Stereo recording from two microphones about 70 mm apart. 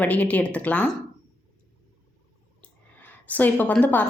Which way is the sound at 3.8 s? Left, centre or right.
Left.